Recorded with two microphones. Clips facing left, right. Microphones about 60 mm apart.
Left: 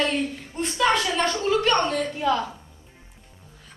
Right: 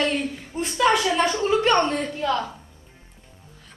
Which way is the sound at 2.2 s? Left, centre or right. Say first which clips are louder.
Left 1 dB; centre.